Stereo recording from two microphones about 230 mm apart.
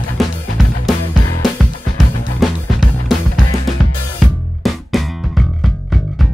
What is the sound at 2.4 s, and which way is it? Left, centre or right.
Music, centre.